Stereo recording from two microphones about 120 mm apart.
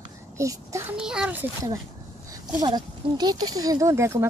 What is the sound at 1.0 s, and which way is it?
Speech, 5° right (ahead or behind).